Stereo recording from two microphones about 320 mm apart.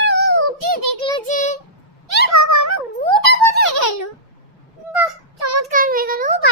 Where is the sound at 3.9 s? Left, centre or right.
Left.